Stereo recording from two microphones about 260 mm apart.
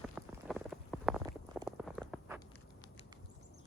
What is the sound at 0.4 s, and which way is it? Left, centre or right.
Stomach rumble, centre.